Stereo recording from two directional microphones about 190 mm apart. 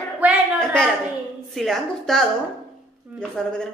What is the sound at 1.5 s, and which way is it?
Speech, centre (ahead or behind).